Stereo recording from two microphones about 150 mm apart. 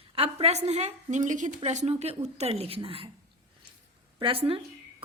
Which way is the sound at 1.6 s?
45° right (ahead or behind).